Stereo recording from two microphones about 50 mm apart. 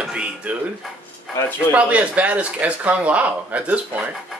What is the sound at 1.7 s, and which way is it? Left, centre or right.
Speech, right.